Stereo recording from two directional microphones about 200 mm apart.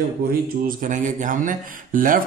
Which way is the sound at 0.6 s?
45° right (ahead or behind).